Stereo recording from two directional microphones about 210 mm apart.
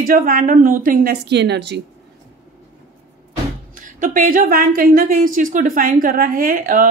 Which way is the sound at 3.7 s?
40° right (ahead or behind).